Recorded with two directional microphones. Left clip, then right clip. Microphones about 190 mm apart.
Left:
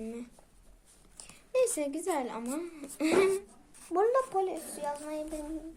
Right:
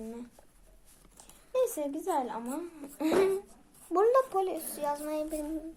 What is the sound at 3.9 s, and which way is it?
Speech, 15° right (ahead or behind).